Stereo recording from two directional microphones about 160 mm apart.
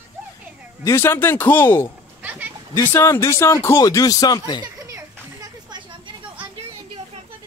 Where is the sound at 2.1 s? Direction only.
10° right (ahead or behind).